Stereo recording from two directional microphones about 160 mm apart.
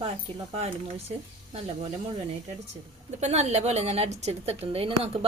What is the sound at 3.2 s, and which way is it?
A woman's voice, 45° right (ahead or behind).